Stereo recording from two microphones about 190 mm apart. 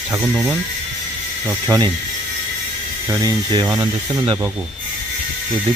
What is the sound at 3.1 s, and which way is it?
Speech, 20° right (ahead or behind).